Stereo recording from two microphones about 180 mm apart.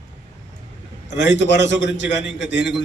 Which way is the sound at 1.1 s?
80° left.